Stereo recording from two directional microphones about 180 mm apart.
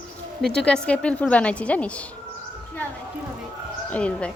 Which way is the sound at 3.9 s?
5° left (ahead or behind).